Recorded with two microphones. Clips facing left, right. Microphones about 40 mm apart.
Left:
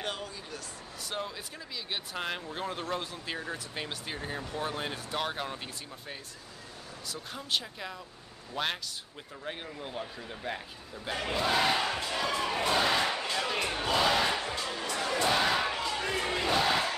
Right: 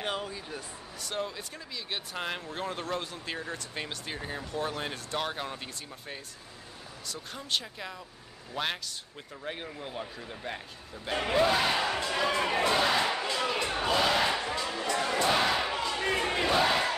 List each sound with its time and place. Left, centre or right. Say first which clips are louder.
0.0 s a sound: right 3 dB; centre
1.0 s speech: right 2 dB; centre
7.1 s speech: even; centre
11.4 s battle cry: left 3 dB; centre
12.4 s speech: right 3 dB; right
12.6 s battle cry: left 1 dB; centre
13.5 s crowd: right 1 dB; centre
13.8 s music: right 1 dB; centre
15.1 s battle cry: even; centre
16.0 s crowd: right 2 dB; right
16.4 s battle cry: right 1 dB; centre